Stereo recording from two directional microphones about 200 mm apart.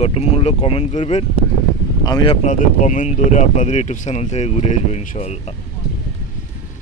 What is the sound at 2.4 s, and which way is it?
Speech, 40° left (ahead or behind).